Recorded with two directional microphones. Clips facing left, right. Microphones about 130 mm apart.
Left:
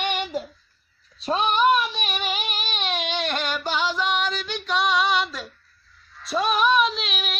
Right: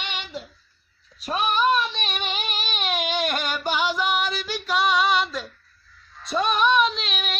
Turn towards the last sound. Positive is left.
turn(degrees=0)  # may be behind; listen again after turning